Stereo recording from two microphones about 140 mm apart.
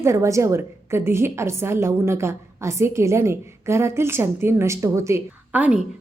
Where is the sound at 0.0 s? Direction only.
20° right (ahead or behind).